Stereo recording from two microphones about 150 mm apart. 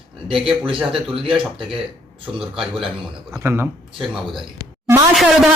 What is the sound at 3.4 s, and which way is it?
Speech, 15° right (ahead or behind).